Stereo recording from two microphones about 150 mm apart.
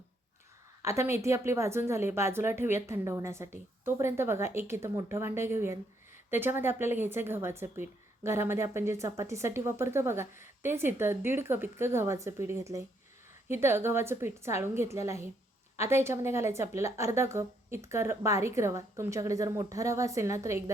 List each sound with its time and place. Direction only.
0.8 s a woman's voice: 20° right (ahead or behind)